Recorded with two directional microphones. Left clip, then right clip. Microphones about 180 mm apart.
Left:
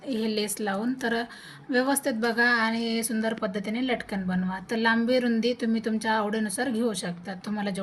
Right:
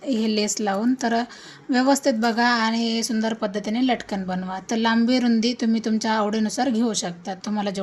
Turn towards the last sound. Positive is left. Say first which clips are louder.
# right 6 dB
turn(degrees=-45)  # may be behind; listen again after turning